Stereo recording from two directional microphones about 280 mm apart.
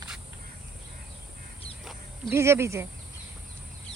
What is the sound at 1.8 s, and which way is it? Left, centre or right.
Speech, centre.